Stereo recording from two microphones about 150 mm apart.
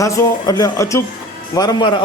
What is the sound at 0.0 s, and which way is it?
A man's voice, 25° left (ahead or behind).